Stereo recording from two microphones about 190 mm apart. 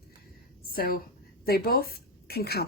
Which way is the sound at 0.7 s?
50° left (ahead or behind).